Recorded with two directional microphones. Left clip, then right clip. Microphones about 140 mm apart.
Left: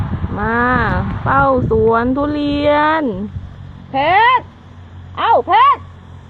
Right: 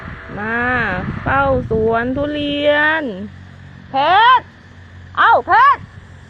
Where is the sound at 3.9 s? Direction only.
30° right (ahead or behind).